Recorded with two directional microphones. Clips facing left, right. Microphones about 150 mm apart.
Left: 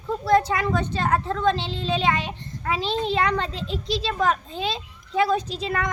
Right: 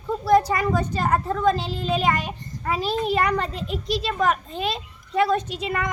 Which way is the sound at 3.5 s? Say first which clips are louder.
Right 1 dB; 30° left (ahead or behind).